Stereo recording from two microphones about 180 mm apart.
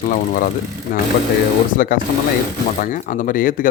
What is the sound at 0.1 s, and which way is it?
Speech, 45° left (ahead or behind).